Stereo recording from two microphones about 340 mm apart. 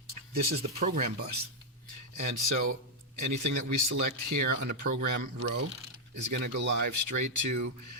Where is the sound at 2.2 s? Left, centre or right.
Right.